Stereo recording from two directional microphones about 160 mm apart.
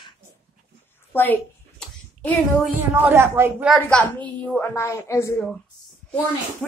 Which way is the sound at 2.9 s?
15° right (ahead or behind).